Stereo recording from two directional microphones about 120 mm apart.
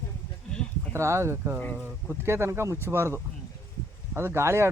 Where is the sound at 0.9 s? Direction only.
20° right (ahead or behind).